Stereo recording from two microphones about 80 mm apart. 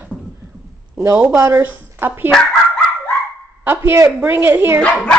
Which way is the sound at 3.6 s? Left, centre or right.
Right.